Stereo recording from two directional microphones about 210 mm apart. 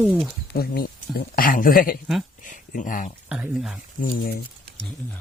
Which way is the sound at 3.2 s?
5° right (ahead or behind).